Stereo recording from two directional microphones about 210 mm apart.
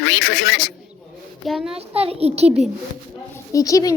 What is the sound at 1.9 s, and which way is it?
Speech, 30° right (ahead or behind).